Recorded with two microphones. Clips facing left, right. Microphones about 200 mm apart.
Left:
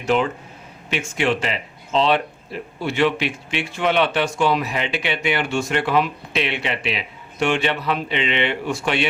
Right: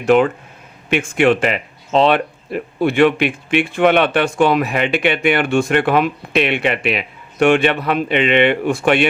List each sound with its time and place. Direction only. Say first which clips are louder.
0.0 s speech: right 7 dB; 55° right (ahead or behind)